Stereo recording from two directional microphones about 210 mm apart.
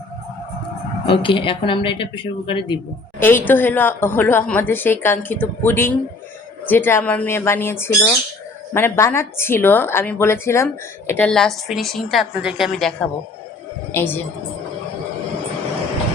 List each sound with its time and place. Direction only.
1.0 s a woman's voice: 25° left (ahead or behind)
3.2 s a woman's voice: 10° left (ahead or behind)